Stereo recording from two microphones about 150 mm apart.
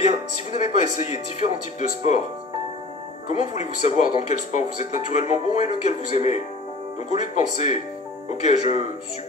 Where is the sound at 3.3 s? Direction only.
50° left (ahead or behind).